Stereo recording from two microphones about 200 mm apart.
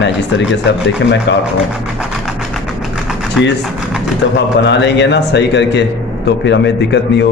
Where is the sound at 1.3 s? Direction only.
60° left (ahead or behind).